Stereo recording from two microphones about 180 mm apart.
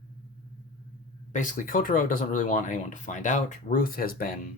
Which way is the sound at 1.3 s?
45° left (ahead or behind).